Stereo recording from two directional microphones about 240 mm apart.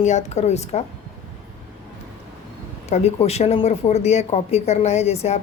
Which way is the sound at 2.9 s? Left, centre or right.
Left.